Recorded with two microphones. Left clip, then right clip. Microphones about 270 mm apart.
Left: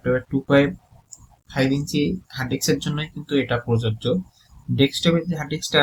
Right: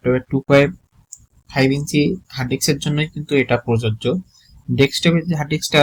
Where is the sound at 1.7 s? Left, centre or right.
Right.